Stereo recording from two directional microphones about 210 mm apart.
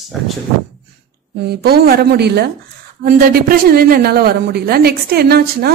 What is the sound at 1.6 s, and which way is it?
A woman's voice, 45° right (ahead or behind).